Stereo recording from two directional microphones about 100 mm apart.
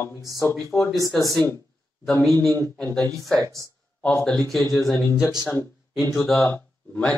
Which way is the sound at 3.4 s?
35° right (ahead or behind).